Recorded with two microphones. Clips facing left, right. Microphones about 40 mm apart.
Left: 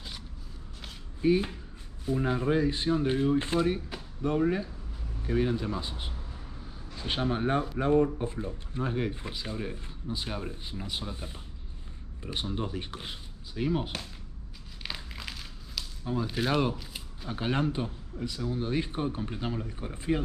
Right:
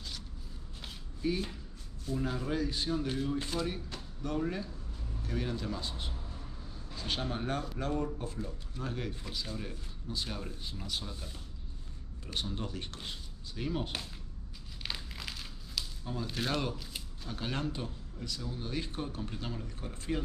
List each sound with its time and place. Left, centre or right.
1.2 s speech: left
14.8 s a sound: centre
16.1 s speech: centre
17.3 s speech: left